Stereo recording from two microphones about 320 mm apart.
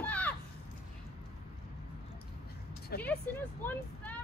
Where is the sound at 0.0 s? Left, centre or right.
Centre.